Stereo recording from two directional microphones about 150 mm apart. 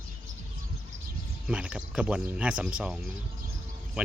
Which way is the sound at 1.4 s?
5° right (ahead or behind).